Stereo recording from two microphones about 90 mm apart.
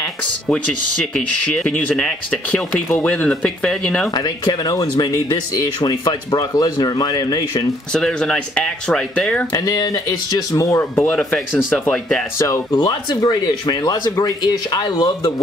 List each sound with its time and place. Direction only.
1.1 s speech: 10° left (ahead or behind)
4.1 s speech: 50° left (ahead or behind)
5.5 s speech: 45° left (ahead or behind)
7.9 s speech: 10° left (ahead or behind)
9.5 s speech: 40° left (ahead or behind)
10.8 s speech: 25° left (ahead or behind)
12.4 s speech: 35° left (ahead or behind)
12.7 s speech: 50° left (ahead or behind)